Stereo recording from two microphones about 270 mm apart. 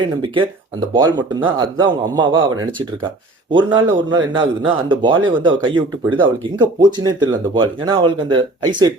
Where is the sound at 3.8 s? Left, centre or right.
Centre.